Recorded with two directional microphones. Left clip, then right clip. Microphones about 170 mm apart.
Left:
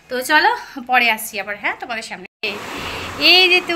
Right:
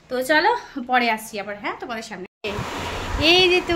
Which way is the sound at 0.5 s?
10° right (ahead or behind).